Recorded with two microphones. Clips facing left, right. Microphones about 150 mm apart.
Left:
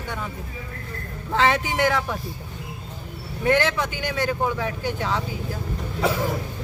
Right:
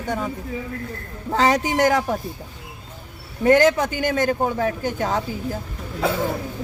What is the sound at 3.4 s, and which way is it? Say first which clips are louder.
A man's voice: right 6 dB; 45° right (ahead or behind).